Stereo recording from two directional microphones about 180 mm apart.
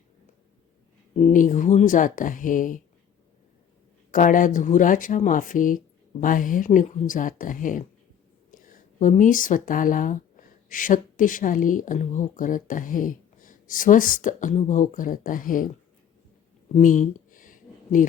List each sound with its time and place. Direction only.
1.3 s speech: 45° left (ahead or behind)
4.1 s speech: 50° left (ahead or behind)
16.7 s a sound: 45° left (ahead or behind)